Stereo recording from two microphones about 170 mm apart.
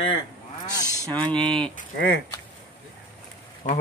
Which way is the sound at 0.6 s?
20° left (ahead or behind).